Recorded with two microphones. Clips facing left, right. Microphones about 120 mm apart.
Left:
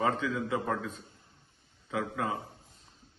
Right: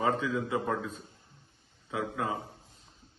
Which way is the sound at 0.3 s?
25° right (ahead or behind).